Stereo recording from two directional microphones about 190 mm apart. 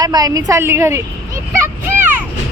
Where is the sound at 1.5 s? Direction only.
10° right (ahead or behind).